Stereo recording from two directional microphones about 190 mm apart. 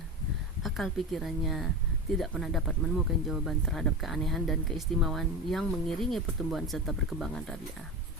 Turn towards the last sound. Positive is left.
turn(degrees=5)  # may be behind; listen again after turning